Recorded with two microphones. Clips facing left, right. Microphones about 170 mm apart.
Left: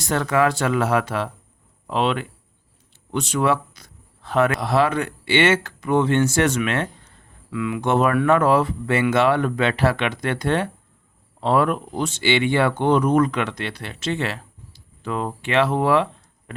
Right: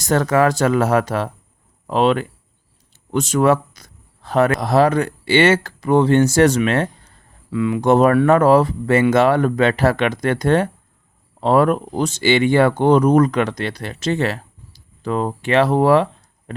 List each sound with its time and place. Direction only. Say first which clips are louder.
0.0 s speech: right 4 dB; 40° right (ahead or behind)